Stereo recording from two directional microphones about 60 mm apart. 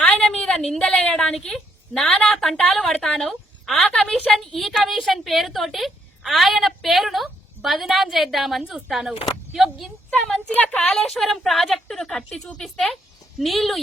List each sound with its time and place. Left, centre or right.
0.2 s a sound: centre
0.8 s a woman's voice: left
1.1 s a woman's voice: centre
10.5 s a woman's voice: left
10.8 s a woman's voice: centre